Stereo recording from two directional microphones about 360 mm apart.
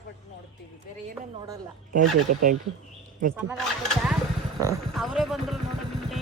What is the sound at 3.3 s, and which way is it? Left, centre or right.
Speech, centre.